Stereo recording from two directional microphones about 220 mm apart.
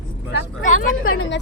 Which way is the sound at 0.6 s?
35° left (ahead or behind).